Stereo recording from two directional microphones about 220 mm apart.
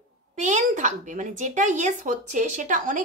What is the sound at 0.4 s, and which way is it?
A child's voice, 35° right (ahead or behind).